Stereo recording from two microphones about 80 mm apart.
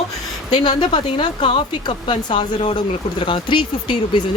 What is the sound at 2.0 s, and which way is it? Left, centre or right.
Speech, left.